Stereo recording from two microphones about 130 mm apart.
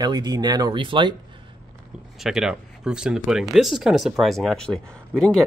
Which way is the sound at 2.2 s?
5° right (ahead or behind).